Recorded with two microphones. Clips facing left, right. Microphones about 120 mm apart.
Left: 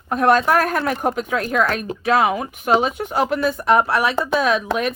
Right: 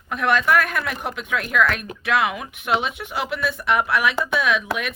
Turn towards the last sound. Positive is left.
turn(degrees=35)  # may be behind; listen again after turning